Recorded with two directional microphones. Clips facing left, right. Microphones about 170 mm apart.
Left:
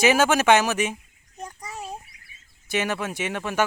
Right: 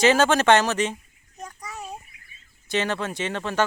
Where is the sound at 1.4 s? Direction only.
25° left (ahead or behind).